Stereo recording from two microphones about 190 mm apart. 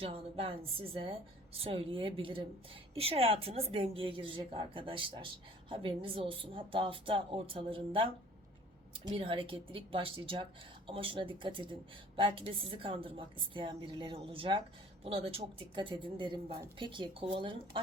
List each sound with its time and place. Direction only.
0.0 s a woman's voice: 30° right (ahead or behind)